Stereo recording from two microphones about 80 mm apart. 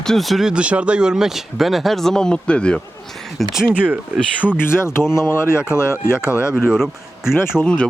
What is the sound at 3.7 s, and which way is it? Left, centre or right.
Speech, centre.